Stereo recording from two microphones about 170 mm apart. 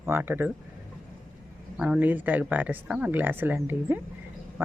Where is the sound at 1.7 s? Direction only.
5° right (ahead or behind).